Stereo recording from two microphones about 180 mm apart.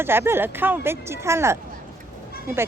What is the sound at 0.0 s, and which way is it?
Speech, 15° right (ahead or behind).